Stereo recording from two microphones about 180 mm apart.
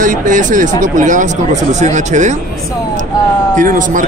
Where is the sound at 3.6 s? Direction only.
45° right (ahead or behind).